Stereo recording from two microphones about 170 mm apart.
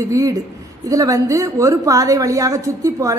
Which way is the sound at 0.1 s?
20° right (ahead or behind).